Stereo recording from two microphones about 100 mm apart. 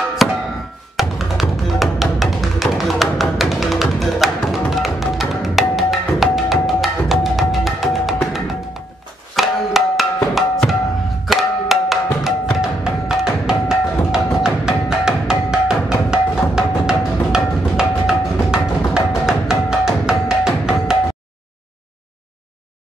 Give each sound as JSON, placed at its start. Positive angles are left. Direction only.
{"t": 0.2, "sound": "music", "side_deg": 0}
{"t": 9.3, "sound": "music", "side_deg": 0}